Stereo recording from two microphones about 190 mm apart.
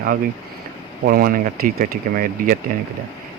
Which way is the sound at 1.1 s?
50° right (ahead or behind).